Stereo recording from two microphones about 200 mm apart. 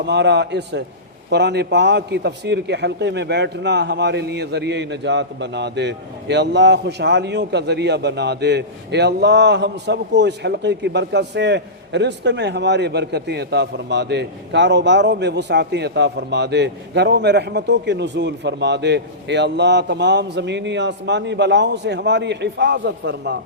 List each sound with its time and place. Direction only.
0.1 s a man's voice: 60° right (ahead or behind)